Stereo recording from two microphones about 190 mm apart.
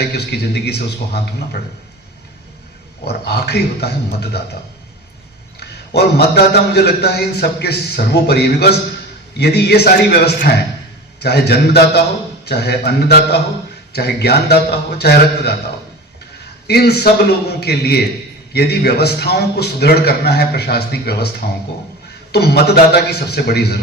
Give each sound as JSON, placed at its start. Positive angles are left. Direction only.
{"t": 0.2, "sound": "a man's voice", "side_deg": 60}
{"t": 3.0, "sound": "a man's voice", "side_deg": 55}
{"t": 5.5, "sound": "a man's voice", "side_deg": 60}
{"t": 16.6, "sound": "a man's voice", "side_deg": 60}